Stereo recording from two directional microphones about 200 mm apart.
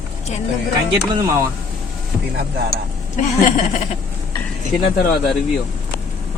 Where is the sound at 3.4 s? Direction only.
40° left (ahead or behind).